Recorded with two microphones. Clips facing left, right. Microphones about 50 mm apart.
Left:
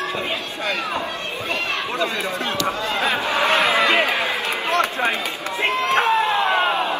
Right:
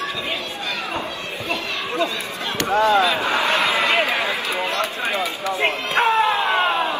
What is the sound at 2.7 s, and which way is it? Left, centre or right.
Speech, right.